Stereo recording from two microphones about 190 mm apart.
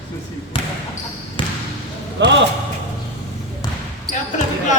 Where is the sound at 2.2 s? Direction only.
70° right (ahead or behind).